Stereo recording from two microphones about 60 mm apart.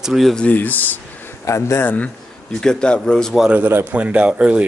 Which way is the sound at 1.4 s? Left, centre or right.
Left.